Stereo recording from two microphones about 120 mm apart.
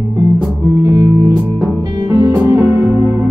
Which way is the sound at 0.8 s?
30° right (ahead or behind).